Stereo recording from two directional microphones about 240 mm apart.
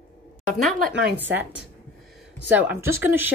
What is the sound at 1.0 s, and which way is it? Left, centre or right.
Speech, centre.